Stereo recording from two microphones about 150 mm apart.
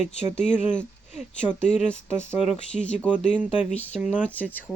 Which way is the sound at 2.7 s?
5° left (ahead or behind).